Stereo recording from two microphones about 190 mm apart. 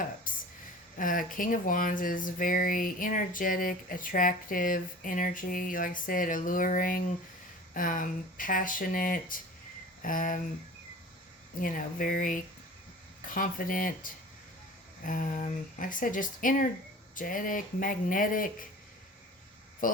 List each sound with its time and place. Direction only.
0.3 s a sound: 45° left (ahead or behind)
0.9 s speech: 45° left (ahead or behind)
11.6 s speech: 45° left (ahead or behind)
19.8 s speech: 45° left (ahead or behind)